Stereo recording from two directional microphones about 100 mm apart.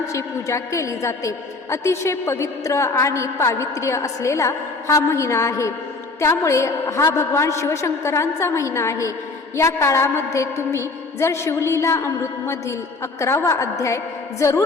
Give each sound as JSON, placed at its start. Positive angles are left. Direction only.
{"t": 0.1, "sound": "a woman's voice", "side_deg": 30}